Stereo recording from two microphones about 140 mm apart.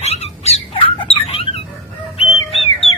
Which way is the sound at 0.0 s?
50° left (ahead or behind).